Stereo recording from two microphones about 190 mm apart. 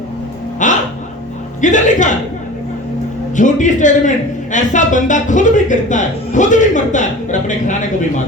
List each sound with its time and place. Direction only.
0.6 s music: 40° left (ahead or behind)
1.6 s speech: 40° left (ahead or behind)
3.3 s speech: 40° left (ahead or behind)